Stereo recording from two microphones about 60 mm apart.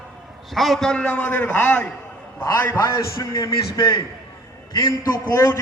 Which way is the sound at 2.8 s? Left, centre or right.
Left.